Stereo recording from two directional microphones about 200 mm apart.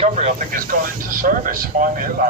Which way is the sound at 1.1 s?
45° right (ahead or behind).